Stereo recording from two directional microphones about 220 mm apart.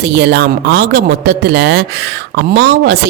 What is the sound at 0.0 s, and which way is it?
Speech, 50° right (ahead or behind).